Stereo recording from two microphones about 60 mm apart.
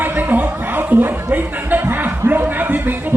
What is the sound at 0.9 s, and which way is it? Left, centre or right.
Speech, right.